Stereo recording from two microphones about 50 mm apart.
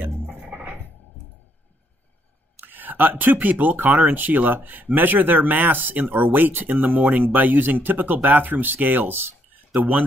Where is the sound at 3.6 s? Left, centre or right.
Right.